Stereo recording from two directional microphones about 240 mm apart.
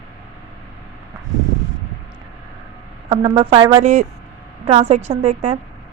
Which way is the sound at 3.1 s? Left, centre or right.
Right.